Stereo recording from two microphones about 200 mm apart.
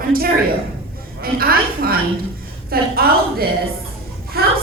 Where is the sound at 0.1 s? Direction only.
50° right (ahead or behind).